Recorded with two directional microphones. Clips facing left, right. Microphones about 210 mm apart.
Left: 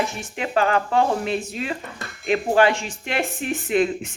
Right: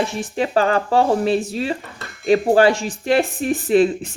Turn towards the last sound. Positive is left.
turn(degrees=-35)  # may be behind; listen again after turning